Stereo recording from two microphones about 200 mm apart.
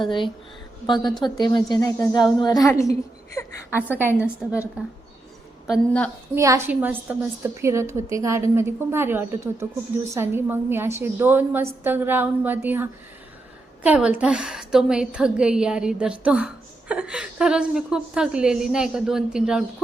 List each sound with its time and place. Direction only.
0.0 s a woman's voice: 25° left (ahead or behind)
3.9 s a woman's voice: 10° right (ahead or behind)
6.3 s a woman's voice: 15° right (ahead or behind)